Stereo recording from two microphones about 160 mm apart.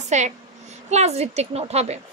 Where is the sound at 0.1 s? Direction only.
45° right (ahead or behind).